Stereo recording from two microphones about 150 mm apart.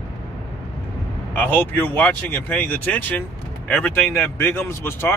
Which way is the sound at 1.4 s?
10° left (ahead or behind).